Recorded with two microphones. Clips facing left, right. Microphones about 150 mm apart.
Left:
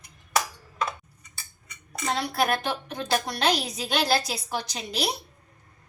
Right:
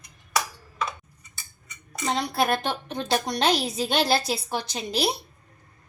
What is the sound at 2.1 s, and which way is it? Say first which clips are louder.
A woman's voice: right 1 dB; 25° right (ahead or behind).